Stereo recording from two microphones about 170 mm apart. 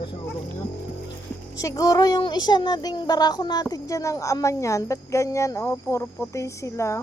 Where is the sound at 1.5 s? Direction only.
20° left (ahead or behind).